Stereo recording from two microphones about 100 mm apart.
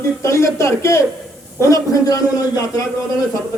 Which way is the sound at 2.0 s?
35° left (ahead or behind).